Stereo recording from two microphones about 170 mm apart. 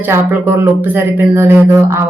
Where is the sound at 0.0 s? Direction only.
15° right (ahead or behind).